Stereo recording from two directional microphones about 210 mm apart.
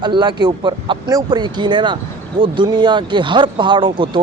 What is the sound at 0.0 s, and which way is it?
Speech, 20° right (ahead or behind).